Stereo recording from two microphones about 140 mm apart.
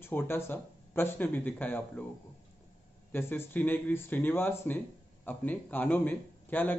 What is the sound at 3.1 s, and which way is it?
Speech, 15° left (ahead or behind).